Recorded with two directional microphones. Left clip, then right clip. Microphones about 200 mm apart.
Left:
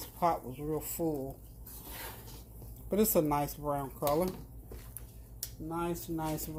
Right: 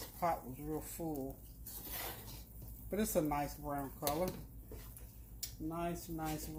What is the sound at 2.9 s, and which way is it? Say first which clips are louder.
Speech: left 7 dB; 50° left (ahead or behind).